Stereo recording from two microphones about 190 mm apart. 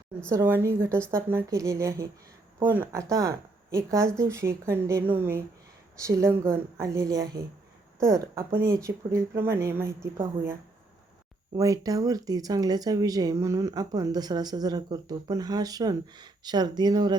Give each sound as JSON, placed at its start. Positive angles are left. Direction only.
{"t": 0.3, "sound": "speech", "side_deg": -15}